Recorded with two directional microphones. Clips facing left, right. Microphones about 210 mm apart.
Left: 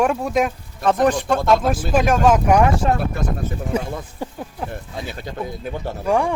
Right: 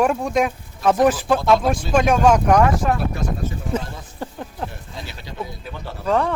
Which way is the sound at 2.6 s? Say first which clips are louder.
Even; 25° left (ahead or behind).